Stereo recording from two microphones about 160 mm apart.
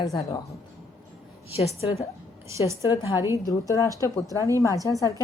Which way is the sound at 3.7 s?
20° left (ahead or behind).